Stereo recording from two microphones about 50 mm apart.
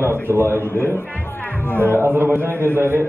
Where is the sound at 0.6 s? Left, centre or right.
Left.